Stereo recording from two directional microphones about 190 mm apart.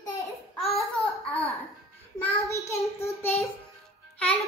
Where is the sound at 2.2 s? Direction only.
15° left (ahead or behind).